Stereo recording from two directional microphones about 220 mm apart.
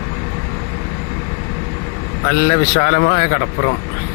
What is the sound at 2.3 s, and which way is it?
A man's voice, 45° left (ahead or behind).